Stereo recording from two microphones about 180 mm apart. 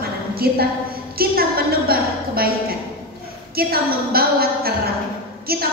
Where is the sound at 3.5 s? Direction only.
55° right (ahead or behind).